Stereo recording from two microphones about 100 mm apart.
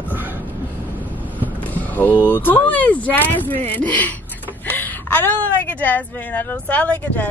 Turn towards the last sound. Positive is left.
turn(degrees=15)  # may be behind; listen again after turning